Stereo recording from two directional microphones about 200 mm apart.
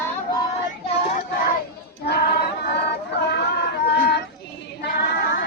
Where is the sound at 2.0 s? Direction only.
55° left (ahead or behind).